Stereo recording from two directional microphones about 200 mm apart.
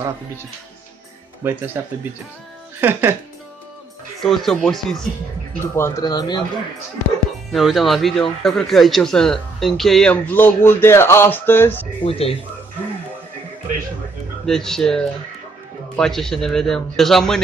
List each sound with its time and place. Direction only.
1.4 s speech: 10° right (ahead or behind)
2.8 s speech: 10° right (ahead or behind)
4.2 s a man's voice: centre (ahead or behind)
5.8 s speech: 15° left (ahead or behind)
7.5 s a man's voice: centre (ahead or behind)
12.0 s speech: 30° left (ahead or behind)
14.4 s a man's voice: centre (ahead or behind)